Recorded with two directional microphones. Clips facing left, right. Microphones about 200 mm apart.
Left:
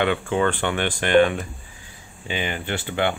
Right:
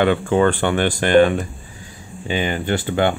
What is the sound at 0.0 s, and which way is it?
Speech, 40° right (ahead or behind).